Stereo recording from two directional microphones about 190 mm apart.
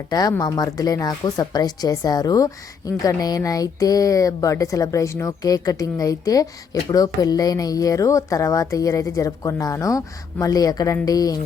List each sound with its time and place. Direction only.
0.1 s speech: 20° left (ahead or behind)